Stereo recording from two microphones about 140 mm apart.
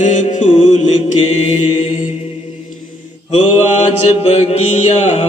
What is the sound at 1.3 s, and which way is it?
Mantra, 50° left (ahead or behind).